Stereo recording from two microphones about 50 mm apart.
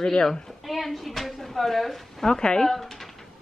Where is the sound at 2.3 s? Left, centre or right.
Centre.